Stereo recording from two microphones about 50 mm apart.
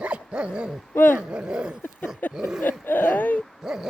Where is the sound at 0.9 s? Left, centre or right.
Left.